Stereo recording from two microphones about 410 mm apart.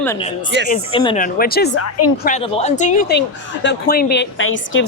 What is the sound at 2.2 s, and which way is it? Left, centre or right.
Speech, centre.